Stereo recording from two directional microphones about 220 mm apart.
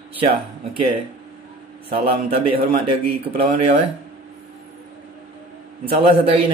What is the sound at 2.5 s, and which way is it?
Speech, 25° right (ahead or behind).